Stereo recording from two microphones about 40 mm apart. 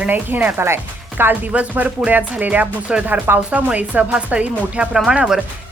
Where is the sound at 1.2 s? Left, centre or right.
Right.